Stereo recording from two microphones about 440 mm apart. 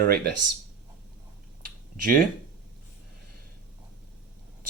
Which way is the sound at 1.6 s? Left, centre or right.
Centre.